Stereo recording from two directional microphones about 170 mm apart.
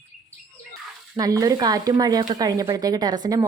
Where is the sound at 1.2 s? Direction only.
20° right (ahead or behind).